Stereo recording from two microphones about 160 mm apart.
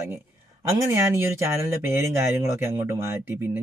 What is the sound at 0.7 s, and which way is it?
Speech, 15° right (ahead or behind).